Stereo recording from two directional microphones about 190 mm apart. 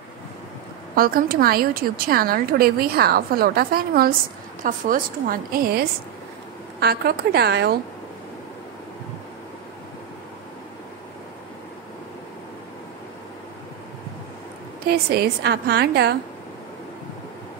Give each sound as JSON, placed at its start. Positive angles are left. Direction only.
{"t": 0.9, "sound": "a woman's voice", "side_deg": -50}
{"t": 14.9, "sound": "a woman's voice", "side_deg": -55}